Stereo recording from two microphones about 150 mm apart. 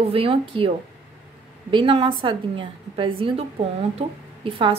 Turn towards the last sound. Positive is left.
turn(degrees=-35)  # may be behind; listen again after turning